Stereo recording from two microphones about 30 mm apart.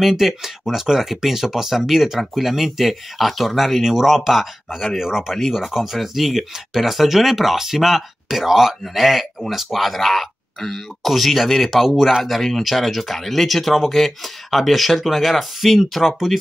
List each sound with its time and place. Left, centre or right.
0.0 s speech: centre
6.1 s speech: centre